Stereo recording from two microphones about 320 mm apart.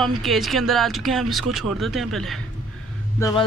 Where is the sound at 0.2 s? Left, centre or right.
Centre.